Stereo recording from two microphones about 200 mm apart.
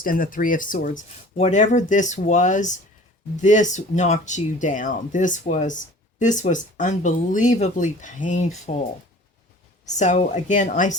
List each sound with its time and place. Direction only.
0.0 s speech: 45° left (ahead or behind)
9.8 s speech: 35° left (ahead or behind)